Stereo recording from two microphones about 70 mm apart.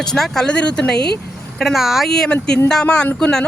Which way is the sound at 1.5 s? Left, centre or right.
Centre.